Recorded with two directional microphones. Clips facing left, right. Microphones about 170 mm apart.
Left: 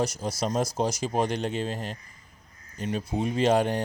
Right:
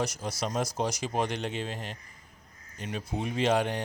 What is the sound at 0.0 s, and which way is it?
Speech, 35° left (ahead or behind).